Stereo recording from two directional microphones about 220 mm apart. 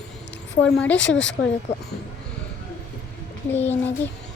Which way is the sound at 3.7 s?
10° left (ahead or behind).